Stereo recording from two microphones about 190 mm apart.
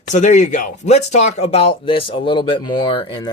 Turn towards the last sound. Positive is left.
turn(degrees=25)  # may be behind; listen again after turning